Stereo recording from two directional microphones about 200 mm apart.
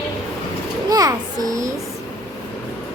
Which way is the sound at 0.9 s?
20° right (ahead or behind).